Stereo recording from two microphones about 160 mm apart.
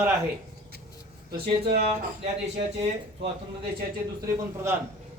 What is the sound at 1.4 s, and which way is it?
Speech, 65° right (ahead or behind).